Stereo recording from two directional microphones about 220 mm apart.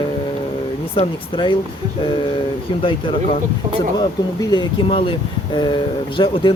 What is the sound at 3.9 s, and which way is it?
Speech, 20° left (ahead or behind).